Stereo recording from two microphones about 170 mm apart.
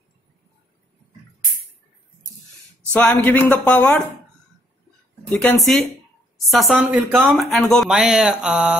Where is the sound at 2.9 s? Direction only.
10° left (ahead or behind).